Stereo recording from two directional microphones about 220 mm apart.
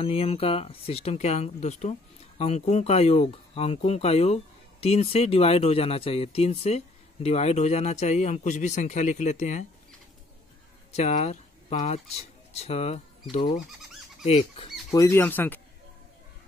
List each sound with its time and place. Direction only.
0.0 s a man's voice: 25° left (ahead or behind)
10.9 s speech: 30° left (ahead or behind)
14.9 s speech: 15° left (ahead or behind)